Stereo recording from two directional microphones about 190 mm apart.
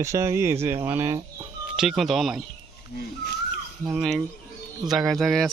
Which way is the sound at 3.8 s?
5° right (ahead or behind).